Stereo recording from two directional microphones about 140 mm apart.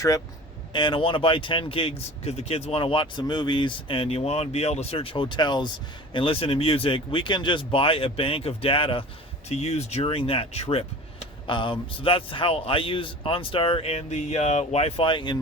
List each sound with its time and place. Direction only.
0.7 s speech: 35° left (ahead or behind)
9.5 s speech: 55° left (ahead or behind); by 15.4 s 35° left (ahead or behind)